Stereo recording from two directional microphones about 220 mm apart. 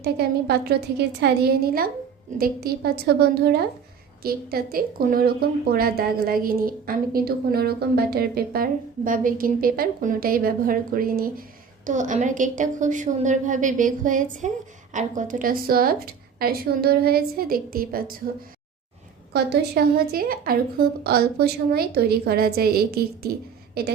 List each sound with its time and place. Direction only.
0.0 s a woman's voice: 45° right (ahead or behind)
19.3 s a woman's voice: 45° right (ahead or behind)